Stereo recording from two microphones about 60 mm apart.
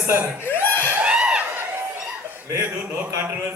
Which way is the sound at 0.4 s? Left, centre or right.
Left.